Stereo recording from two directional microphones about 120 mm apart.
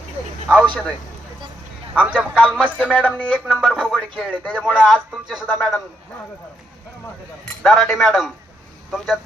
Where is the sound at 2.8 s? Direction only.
10° left (ahead or behind).